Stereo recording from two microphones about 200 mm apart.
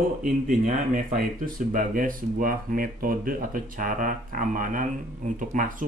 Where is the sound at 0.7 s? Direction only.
45° right (ahead or behind).